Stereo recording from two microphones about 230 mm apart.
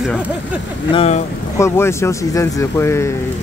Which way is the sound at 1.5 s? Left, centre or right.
Centre.